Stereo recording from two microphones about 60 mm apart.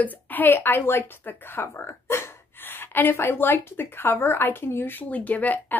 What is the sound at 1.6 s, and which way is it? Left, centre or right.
Speech, left.